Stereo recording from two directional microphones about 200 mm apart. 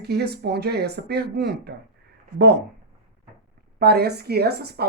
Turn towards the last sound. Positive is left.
turn(degrees=-55)  # may be behind; listen again after turning